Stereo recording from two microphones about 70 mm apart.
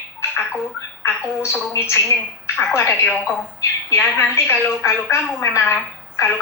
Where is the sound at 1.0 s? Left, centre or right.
Left.